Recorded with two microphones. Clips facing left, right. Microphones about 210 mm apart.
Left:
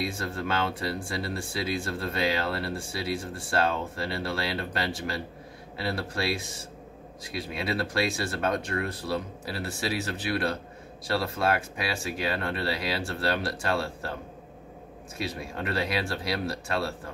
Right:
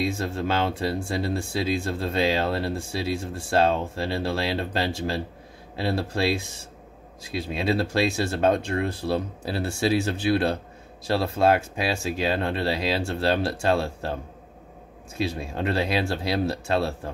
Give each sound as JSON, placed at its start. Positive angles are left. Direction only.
{"t": 0.0, "sound": "speech", "side_deg": -25}
{"t": 15.5, "sound": "speech", "side_deg": -25}